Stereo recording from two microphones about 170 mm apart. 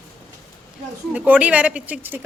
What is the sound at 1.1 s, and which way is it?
Speech, 10° right (ahead or behind).